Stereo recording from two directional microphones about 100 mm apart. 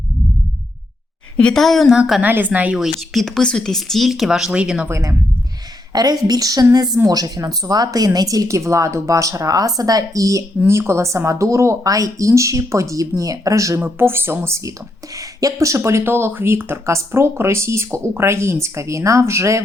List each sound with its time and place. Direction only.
1.4 s speech: 5° left (ahead or behind)
2.2 s a woman's voice: 20° right (ahead or behind)
2.8 s speech: centre (ahead or behind)
4.9 s speech: 30° right (ahead or behind)
5.9 s a woman's voice: 40° right (ahead or behind)
13.7 s speech: 20° right (ahead or behind)